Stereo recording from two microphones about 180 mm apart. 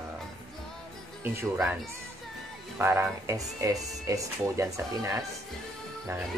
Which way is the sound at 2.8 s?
15° right (ahead or behind).